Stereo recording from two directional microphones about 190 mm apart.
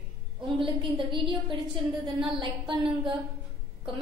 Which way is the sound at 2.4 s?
25° right (ahead or behind).